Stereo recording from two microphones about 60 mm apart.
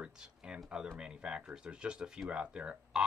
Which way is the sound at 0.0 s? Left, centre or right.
Centre.